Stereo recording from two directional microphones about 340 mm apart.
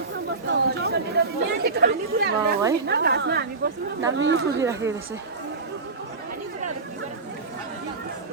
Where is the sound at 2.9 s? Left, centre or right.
Right.